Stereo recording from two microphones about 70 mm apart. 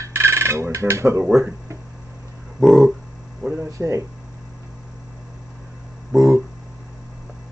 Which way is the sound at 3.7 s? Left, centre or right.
Right.